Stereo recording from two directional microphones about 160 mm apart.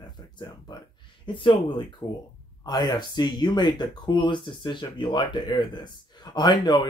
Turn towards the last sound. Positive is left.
turn(degrees=30)  # may be behind; listen again after turning